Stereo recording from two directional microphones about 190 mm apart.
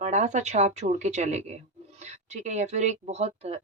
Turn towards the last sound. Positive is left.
turn(degrees=-35)  # may be behind; listen again after turning